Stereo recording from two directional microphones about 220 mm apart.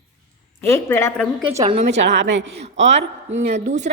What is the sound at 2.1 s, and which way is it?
Speech, 55° right (ahead or behind).